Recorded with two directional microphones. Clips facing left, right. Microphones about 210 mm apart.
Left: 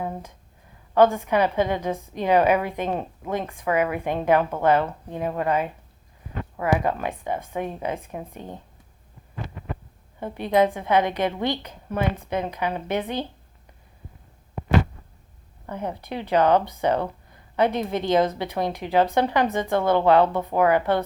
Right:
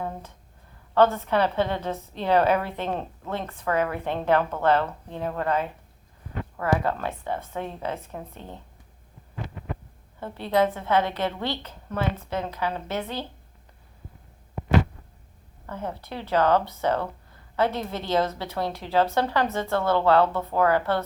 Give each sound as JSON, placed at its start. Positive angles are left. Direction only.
{"t": 0.0, "sound": "a sound", "side_deg": 10}
{"t": 0.9, "sound": "speech", "side_deg": 15}
{"t": 10.2, "sound": "speech", "side_deg": 15}
{"t": 15.6, "sound": "speech", "side_deg": 15}